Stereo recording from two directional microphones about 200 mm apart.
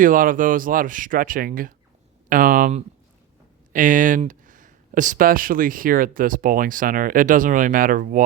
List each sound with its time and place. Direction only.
0.0 s speech: 45° right (ahead or behind)